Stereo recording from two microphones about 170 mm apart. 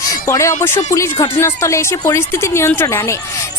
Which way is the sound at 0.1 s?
20° left (ahead or behind).